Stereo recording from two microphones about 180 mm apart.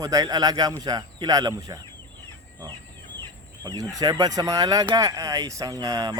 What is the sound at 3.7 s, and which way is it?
Speech, 20° right (ahead or behind).